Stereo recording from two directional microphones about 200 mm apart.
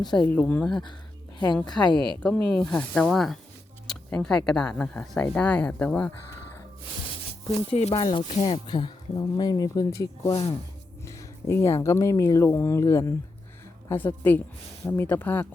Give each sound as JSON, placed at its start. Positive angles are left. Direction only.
{"t": 0.0, "sound": "speech", "side_deg": 20}
{"t": 0.3, "sound": "speech", "side_deg": 10}
{"t": 1.6, "sound": "speech", "side_deg": 20}
{"t": 2.2, "sound": "speech", "side_deg": 5}
{"t": 7.7, "sound": "speech", "side_deg": 30}